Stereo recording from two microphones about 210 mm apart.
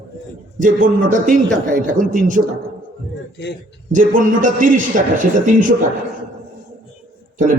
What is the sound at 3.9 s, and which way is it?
A man's voice, 40° right (ahead or behind).